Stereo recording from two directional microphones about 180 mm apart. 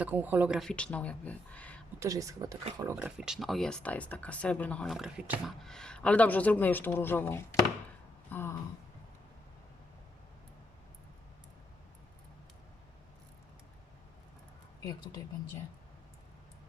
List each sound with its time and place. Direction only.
0.0 s speech: 10° right (ahead or behind); by 1.8 s 10° left (ahead or behind)
2.0 s speech: 20° right (ahead or behind)
3.2 s speech: 5° right (ahead or behind)
8.3 s a sound: 15° left (ahead or behind)
14.8 s speech: 20° left (ahead or behind)